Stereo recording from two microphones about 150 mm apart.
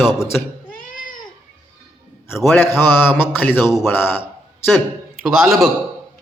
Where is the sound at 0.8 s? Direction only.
65° left (ahead or behind).